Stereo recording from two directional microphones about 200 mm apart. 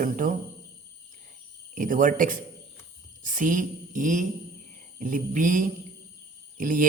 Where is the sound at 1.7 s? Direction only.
40° right (ahead or behind).